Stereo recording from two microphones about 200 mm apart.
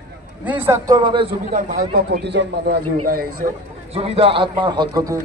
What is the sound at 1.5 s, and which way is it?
A man's voice, 50° right (ahead or behind).